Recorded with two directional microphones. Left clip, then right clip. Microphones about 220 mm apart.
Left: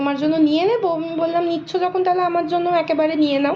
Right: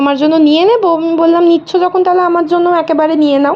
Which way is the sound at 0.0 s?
40° right (ahead or behind).